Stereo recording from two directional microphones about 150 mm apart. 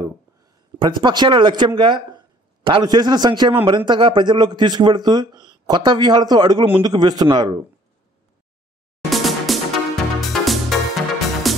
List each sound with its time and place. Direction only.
0.4 s a man's voice: 30° right (ahead or behind)
9.1 s music: centre (ahead or behind)